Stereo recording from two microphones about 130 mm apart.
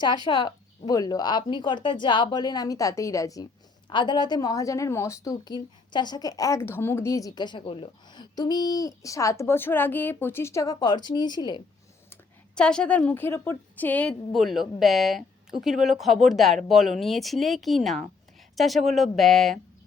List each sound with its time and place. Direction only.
0.3 s speech: 35° left (ahead or behind)
3.8 s a woman's voice: 35° left (ahead or behind)
12.5 s a woman's voice: 5° left (ahead or behind)